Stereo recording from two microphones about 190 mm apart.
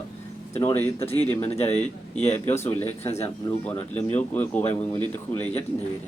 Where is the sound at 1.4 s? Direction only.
35° left (ahead or behind).